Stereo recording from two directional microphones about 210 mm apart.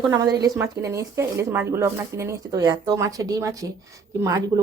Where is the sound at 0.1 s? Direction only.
15° right (ahead or behind).